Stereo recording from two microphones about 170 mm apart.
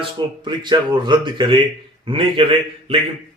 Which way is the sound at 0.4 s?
25° right (ahead or behind).